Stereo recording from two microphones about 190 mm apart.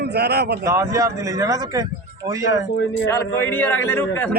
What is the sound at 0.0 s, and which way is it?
Speech, 55° right (ahead or behind).